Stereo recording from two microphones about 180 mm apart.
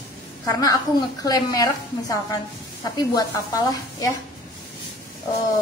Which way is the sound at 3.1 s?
20° left (ahead or behind).